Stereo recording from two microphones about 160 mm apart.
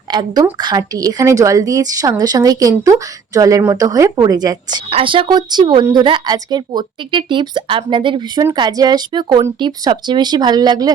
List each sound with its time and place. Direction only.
0.1 s a woman's voice: 25° right (ahead or behind)
4.9 s a woman's voice: 35° right (ahead or behind)